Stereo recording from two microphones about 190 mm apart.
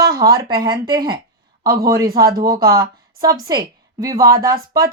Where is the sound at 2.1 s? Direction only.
25° right (ahead or behind).